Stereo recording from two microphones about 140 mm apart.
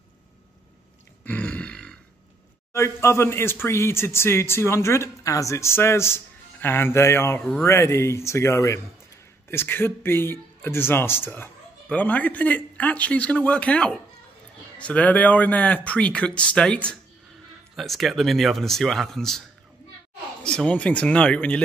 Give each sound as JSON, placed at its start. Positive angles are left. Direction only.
{"t": 1.2, "sound": "grunt", "side_deg": 10}
{"t": 2.7, "sound": "speech", "side_deg": 20}
{"t": 20.4, "sound": "speech", "side_deg": 10}